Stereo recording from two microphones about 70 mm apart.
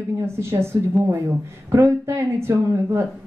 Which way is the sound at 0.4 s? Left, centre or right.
Right.